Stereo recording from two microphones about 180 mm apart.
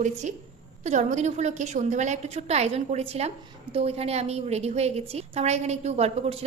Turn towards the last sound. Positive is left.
turn(degrees=-35)  # may be behind; listen again after turning